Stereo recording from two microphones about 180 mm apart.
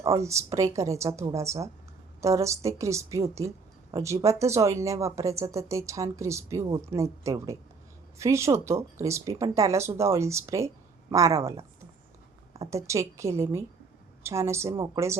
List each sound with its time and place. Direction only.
0.0 s speech: 15° right (ahead or behind)
12.5 s speech: 15° right (ahead or behind)